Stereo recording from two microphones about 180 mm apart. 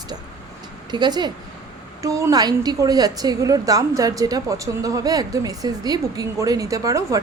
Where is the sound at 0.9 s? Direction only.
25° right (ahead or behind).